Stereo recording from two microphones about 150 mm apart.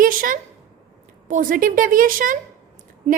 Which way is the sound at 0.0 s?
65° right (ahead or behind).